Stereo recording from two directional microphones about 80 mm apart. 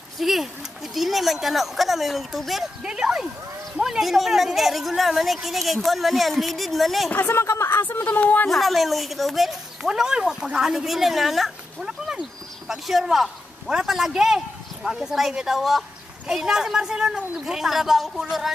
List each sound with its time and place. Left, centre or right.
0.2 s speech: centre
7.1 s speech: left
7.4 s speech: left
8.5 s speech: centre